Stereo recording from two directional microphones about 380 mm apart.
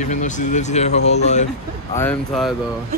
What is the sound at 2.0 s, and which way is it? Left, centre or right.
Speech, centre.